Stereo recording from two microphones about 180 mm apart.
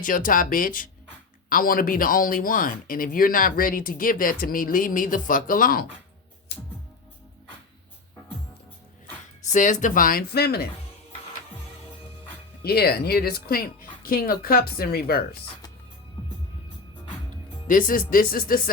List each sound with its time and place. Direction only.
0.0 s speech: 50° left (ahead or behind)
9.4 s speech: 40° left (ahead or behind); by 10.7 s 60° left (ahead or behind)
12.6 s a woman's voice: 60° left (ahead or behind)
17.7 s speech: 50° left (ahead or behind)